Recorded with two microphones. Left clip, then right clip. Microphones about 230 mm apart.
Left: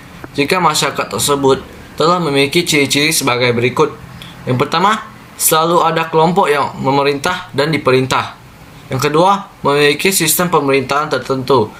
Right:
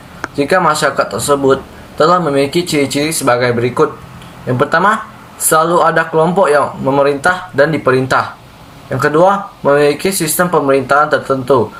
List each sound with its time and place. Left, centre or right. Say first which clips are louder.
0.3 s speech: right 1 dB; centre